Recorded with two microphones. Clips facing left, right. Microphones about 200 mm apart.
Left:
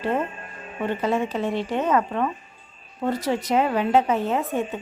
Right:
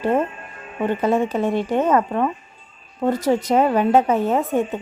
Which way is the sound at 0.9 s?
50° right (ahead or behind).